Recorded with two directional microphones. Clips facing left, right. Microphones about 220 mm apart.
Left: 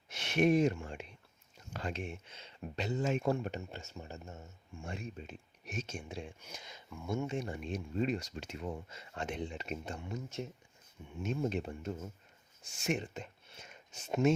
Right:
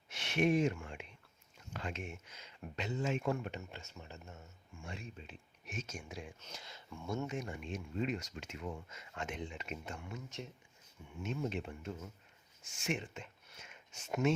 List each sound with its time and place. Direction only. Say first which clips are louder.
0.1 s speech: left 3 dB; 40° left (ahead or behind)
6.4 s speech: left 1 dB; 15° left (ahead or behind); by 10.0 s 35° left (ahead or behind)
11.2 s speech: left 4 dB; 40° left (ahead or behind)